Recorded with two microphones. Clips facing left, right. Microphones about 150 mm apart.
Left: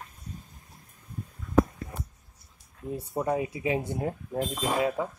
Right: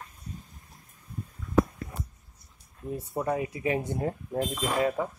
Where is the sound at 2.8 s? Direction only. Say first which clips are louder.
Left 1 dB; 15° left (ahead or behind).